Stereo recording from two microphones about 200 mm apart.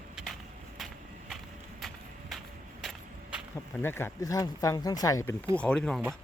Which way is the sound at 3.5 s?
10° left (ahead or behind).